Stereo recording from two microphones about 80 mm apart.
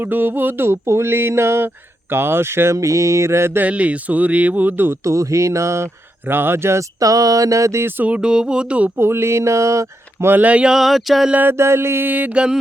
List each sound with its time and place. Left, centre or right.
0.0 s speech: right
3.7 s speech: centre
5.0 s speech: right
7.0 s speech: right; by 8.9 s centre
9.0 s speech: right; by 11.3 s centre
11.3 s speech: right
11.5 s speech: right; by 12.5 s centre